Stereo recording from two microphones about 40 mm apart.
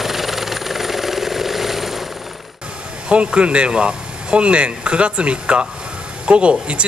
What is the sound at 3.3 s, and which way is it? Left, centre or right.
Speech, right.